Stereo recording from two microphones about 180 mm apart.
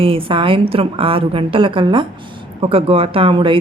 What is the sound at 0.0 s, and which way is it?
A woman's voice, 30° right (ahead or behind).